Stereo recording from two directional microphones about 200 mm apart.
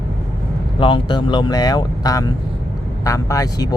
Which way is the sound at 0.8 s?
25° left (ahead or behind).